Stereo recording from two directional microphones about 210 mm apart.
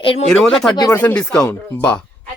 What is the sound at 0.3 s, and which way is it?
Speech, 5° left (ahead or behind).